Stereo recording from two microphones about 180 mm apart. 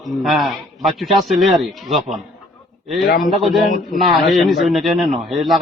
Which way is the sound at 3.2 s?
Centre (ahead or behind).